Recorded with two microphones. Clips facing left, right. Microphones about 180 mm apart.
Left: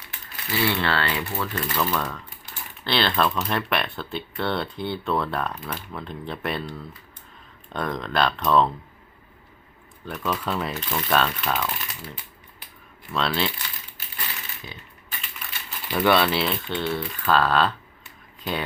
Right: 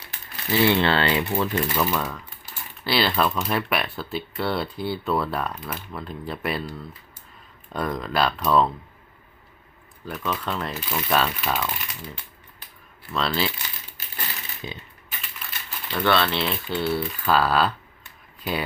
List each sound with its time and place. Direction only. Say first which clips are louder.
0.6 s speech: right 4 dB; 20° right (ahead or behind); by 8.7 s 5° right (ahead or behind)
10.1 s speech: left 1 dB; centre (ahead or behind)
14.6 s speech: right 8 dB; 20° right (ahead or behind)
15.9 s speech: left 2 dB; 10° left (ahead or behind); by 18.6 s 5° right (ahead or behind)